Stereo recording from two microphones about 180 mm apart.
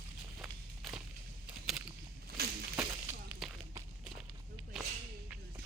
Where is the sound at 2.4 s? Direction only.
60° right (ahead or behind).